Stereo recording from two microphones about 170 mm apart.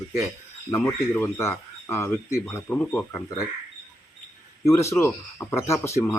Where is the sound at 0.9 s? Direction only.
15° left (ahead or behind).